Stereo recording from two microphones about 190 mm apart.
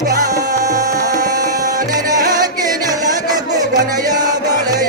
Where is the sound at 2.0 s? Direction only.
20° right (ahead or behind).